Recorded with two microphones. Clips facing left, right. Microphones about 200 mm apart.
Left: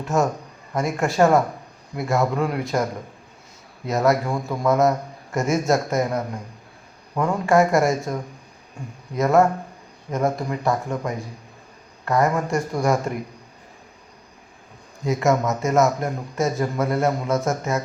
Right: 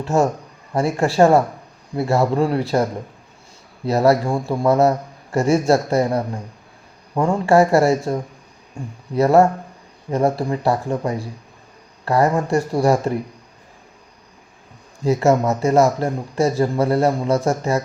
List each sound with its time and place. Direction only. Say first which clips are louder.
0.0 s speech: right 3 dB; 30° right (ahead or behind)
3.8 s speech: right 4 dB; 35° right (ahead or behind)
15.0 s speech: right 4 dB; 35° right (ahead or behind)